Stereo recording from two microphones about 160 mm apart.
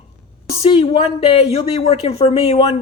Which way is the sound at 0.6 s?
35° left (ahead or behind).